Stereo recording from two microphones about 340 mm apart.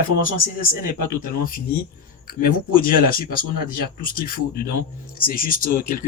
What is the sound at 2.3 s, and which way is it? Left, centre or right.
Speech, left.